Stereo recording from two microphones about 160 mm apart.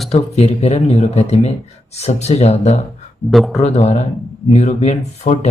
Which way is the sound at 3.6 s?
45° left (ahead or behind).